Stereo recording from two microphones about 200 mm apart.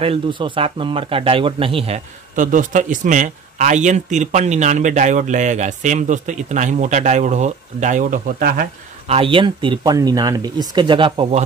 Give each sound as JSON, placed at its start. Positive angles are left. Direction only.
{"t": 0.0, "sound": "speech", "side_deg": -25}
{"t": 2.3, "sound": "a man's voice", "side_deg": -40}
{"t": 9.0, "sound": "speech", "side_deg": -30}